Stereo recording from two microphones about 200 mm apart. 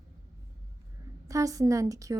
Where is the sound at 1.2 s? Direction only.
15° right (ahead or behind).